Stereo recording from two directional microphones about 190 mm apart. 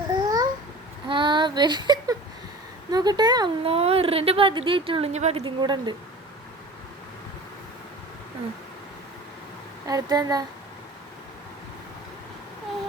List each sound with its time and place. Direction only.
0.1 s babbling: 20° right (ahead or behind)
1.0 s whimper: 25° right (ahead or behind)
2.9 s a woman's voice: 20° right (ahead or behind)
5.4 s a woman's voice: 25° right (ahead or behind)
9.8 s a woman's voice: 20° right (ahead or behind)